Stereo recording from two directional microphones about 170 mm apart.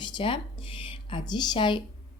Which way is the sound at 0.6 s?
30° left (ahead or behind).